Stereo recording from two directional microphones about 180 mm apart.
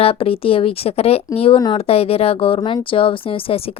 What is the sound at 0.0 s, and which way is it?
A woman's voice, 30° left (ahead or behind).